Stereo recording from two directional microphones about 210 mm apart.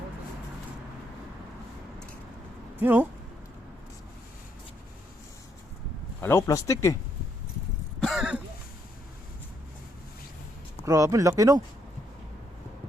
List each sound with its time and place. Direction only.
2.8 s speech: 10° right (ahead or behind)
6.1 s speech: 10° left (ahead or behind)
8.0 s throat clearing: centre (ahead or behind)
10.8 s speech: 15° right (ahead or behind)